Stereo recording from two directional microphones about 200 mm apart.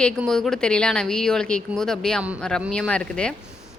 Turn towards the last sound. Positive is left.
turn(degrees=5)  # may be behind; listen again after turning